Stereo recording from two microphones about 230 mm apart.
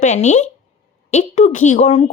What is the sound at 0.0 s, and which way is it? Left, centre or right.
Speech, left.